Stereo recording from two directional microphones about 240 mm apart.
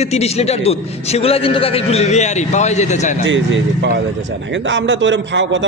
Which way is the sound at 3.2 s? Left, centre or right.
Right.